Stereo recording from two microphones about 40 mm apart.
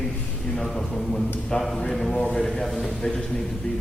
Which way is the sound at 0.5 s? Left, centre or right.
Centre.